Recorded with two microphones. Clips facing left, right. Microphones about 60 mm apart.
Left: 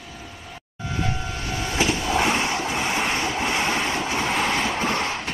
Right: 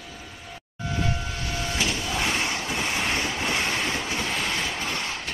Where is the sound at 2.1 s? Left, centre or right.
Left.